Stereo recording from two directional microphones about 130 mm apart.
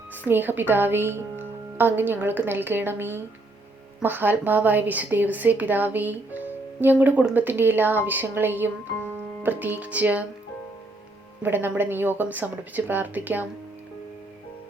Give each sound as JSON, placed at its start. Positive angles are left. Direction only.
{"t": 0.3, "sound": "a woman's voice", "side_deg": -15}
{"t": 11.4, "sound": "a woman's voice", "side_deg": -15}